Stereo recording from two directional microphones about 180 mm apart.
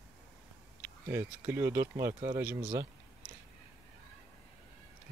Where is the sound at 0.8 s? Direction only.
15° right (ahead or behind).